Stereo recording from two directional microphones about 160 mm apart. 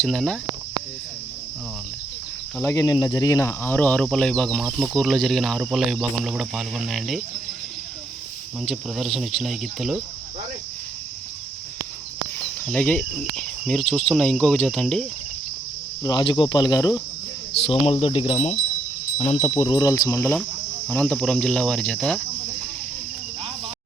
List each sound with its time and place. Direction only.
0.0 s speech: 5° left (ahead or behind)
2.6 s cricket: 20° left (ahead or behind)
4.8 s speech: centre (ahead or behind)
8.6 s speech: centre (ahead or behind)
12.4 s cricket: 10° left (ahead or behind)
16.0 s speech: 25° left (ahead or behind)
17.7 s cricket: 40° left (ahead or behind)
19.5 s speech: 30° left (ahead or behind)
20.8 s speech: 5° left (ahead or behind)